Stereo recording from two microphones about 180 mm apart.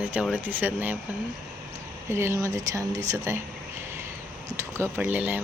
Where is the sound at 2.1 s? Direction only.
15° right (ahead or behind).